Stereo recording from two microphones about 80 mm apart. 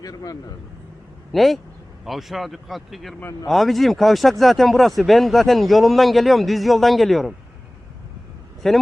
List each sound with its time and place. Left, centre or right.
0.0 s a man's voice: left
1.3 s speech: centre
8.6 s speech: centre